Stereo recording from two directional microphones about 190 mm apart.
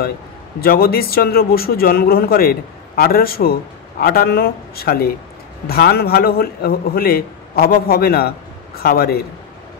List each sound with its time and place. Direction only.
0.6 s a man's voice: 50° left (ahead or behind)